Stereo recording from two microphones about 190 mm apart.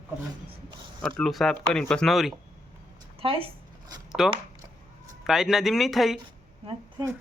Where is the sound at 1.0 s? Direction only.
Centre (ahead or behind).